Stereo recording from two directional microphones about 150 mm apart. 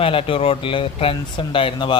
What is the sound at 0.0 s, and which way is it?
Speech, 35° left (ahead or behind).